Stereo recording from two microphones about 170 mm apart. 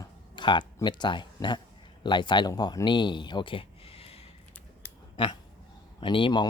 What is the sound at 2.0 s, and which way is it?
Speech, 25° left (ahead or behind).